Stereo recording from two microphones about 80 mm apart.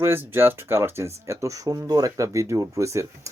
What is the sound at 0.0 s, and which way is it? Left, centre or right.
Speech, right.